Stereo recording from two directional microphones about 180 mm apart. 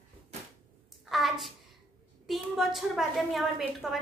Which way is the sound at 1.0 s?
Centre (ahead or behind).